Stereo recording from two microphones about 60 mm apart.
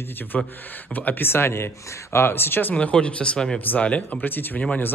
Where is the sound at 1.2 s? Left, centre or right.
Left.